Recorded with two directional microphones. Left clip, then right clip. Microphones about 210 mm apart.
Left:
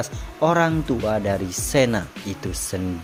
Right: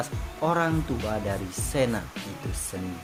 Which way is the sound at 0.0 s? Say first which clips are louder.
Left 7 dB; 30° left (ahead or behind).